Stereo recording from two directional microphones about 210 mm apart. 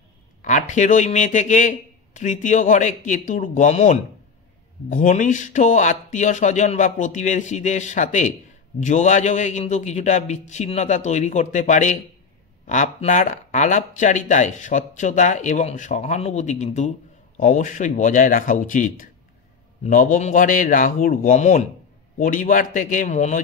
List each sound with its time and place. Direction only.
0.4 s speech: 35° left (ahead or behind)